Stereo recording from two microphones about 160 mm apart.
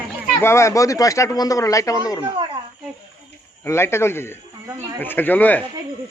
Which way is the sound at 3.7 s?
15° left (ahead or behind).